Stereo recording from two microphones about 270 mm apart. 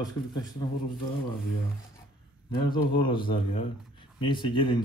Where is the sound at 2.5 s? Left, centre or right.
Centre.